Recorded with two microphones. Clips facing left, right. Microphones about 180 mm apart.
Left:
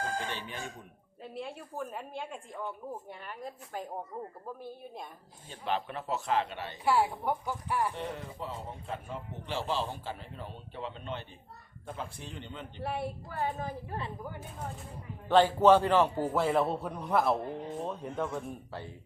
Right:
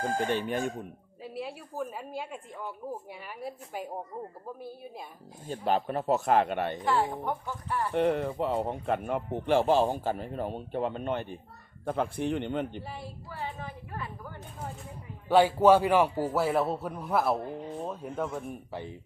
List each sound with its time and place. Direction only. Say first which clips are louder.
0.2 s a man's voice: right 10 dB; 50° right (ahead or behind)
1.2 s a man's voice: right 2 dB; 5° right (ahead or behind)
5.5 s a man's voice: right 6 dB; 40° right (ahead or behind)
6.7 s a woman's voice: left 4 dB; 10° left (ahead or behind)
7.9 s a man's voice: right 12 dB; 65° right (ahead or behind)
12.8 s speech: left 6 dB; 60° left (ahead or behind); by 13.7 s 45° left (ahead or behind)
15.3 s a man's voice: right 1 dB; 10° right (ahead or behind)
18.7 s a man's voice: right 4 dB; 15° right (ahead or behind)